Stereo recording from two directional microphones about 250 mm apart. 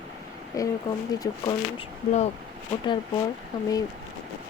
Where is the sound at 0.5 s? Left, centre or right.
Centre.